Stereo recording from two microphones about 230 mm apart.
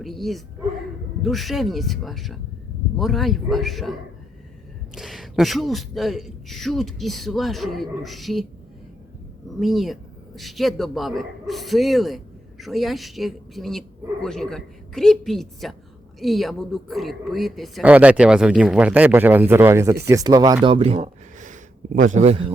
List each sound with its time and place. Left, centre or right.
0.0 s a man's voice: centre
4.9 s a man's voice: centre
9.6 s a man's voice: centre
20.7 s a sound: right
22.1 s speech: right